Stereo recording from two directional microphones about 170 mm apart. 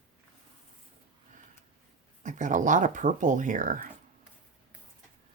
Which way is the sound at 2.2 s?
45° right (ahead or behind).